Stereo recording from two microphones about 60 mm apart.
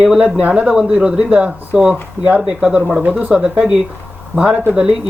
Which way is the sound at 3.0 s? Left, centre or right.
Centre.